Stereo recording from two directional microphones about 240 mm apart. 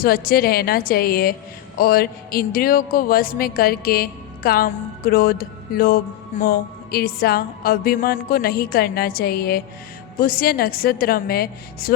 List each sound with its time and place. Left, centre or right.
0.0 s a woman's voice: left